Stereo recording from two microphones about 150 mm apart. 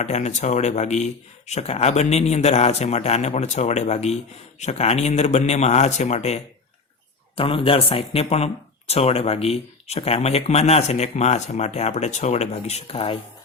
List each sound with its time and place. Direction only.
0.0 s speech: 50° left (ahead or behind)
7.3 s a man's voice: 35° left (ahead or behind)